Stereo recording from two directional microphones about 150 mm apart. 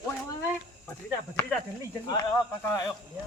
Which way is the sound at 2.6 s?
15° left (ahead or behind).